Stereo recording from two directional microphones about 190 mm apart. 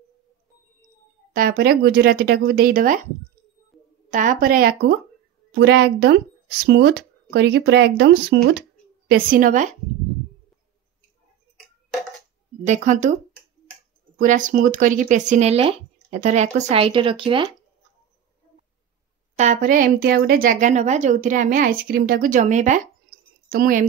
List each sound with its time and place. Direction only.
1.3 s a woman's voice: 45° right (ahead or behind)
4.1 s a woman's voice: 45° right (ahead or behind)
5.5 s a woman's voice: 65° right (ahead or behind); by 9.7 s 45° right (ahead or behind)
12.6 s speech: 40° right (ahead or behind)
14.1 s speech: 40° right (ahead or behind); by 17.6 s 25° right (ahead or behind)
19.3 s a woman's voice: 40° right (ahead or behind)